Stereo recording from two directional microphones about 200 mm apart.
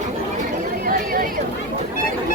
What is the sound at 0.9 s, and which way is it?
Chatter, 45° right (ahead or behind).